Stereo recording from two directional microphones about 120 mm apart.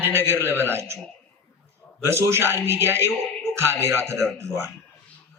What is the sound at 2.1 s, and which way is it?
A man's voice, 20° right (ahead or behind).